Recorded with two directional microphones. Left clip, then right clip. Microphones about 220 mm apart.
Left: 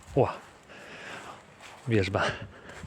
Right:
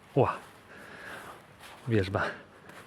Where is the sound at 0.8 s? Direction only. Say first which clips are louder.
Left 2 dB; 5° left (ahead or behind).